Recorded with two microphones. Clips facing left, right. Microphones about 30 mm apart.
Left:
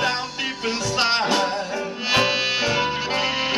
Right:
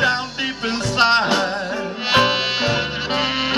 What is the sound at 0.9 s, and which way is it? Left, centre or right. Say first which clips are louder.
Music: right 5 dB; right.